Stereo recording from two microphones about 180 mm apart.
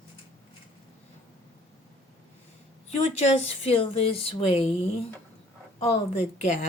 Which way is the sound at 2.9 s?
35° left (ahead or behind).